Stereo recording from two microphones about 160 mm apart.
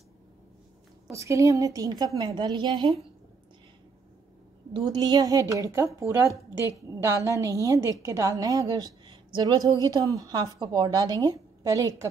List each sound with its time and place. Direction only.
1.1 s a woman's voice: 20° right (ahead or behind)
4.7 s a woman's voice: 25° right (ahead or behind)